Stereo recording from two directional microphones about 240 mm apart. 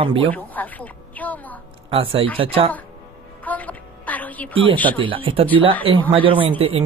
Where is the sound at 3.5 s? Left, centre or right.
Centre.